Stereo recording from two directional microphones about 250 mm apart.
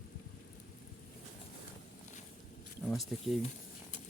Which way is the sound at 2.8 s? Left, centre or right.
Centre.